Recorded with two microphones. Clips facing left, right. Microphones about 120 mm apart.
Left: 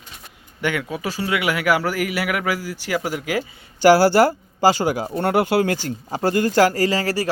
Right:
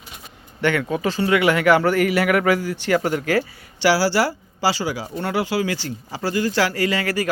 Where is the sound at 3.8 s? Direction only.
50° left (ahead or behind).